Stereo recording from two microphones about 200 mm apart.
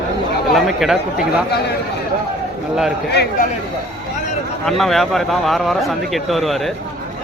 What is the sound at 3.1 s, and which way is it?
Speech, 50° left (ahead or behind).